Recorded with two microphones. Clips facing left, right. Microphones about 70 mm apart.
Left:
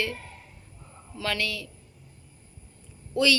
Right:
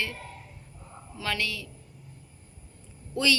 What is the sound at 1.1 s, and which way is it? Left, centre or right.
Speech, centre.